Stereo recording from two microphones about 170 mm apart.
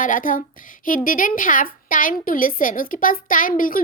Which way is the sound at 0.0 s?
50° left (ahead or behind).